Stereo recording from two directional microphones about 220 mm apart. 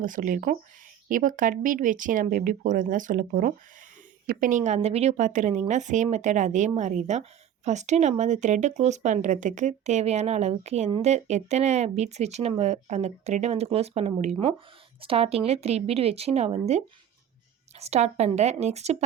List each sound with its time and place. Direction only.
0.0 s a woman's voice: 35° right (ahead or behind)